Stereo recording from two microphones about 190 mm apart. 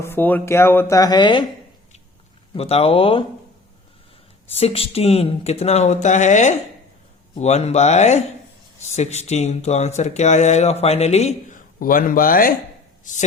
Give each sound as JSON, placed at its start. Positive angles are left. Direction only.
{"t": 0.0, "sound": "speech", "side_deg": 10}
{"t": 2.6, "sound": "speech", "side_deg": 30}
{"t": 4.5, "sound": "speech", "side_deg": 30}
{"t": 11.8, "sound": "speech", "side_deg": 45}